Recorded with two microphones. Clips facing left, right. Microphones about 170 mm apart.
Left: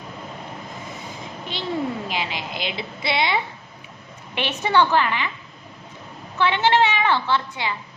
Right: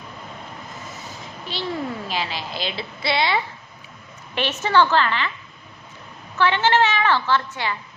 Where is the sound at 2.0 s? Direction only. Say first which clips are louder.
Even; 20° left (ahead or behind).